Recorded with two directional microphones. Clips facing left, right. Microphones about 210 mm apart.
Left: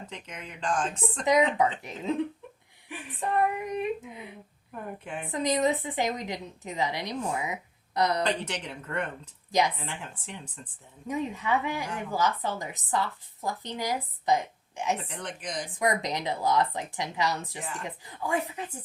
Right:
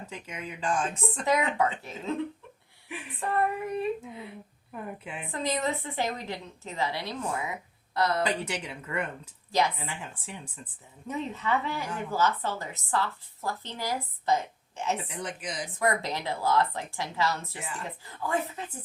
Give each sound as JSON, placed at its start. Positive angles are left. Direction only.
{"t": 0.1, "sound": "speech", "side_deg": -5}
{"t": 1.2, "sound": "a woman's voice", "side_deg": 15}
{"t": 3.2, "sound": "a woman's voice", "side_deg": 15}
{"t": 4.9, "sound": "speech", "side_deg": -5}
{"t": 5.3, "sound": "a woman's voice", "side_deg": 15}
{"t": 8.2, "sound": "speech", "side_deg": -5}
{"t": 9.5, "sound": "a woman's voice", "side_deg": 15}
{"t": 9.7, "sound": "speech", "side_deg": -5}
{"t": 11.1, "sound": "a woman's voice", "side_deg": 10}
{"t": 15.1, "sound": "speech", "side_deg": -5}
{"t": 15.8, "sound": "a woman's voice", "side_deg": 15}